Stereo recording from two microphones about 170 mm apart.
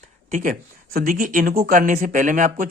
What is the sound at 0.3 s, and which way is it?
Speech, 50° right (ahead or behind).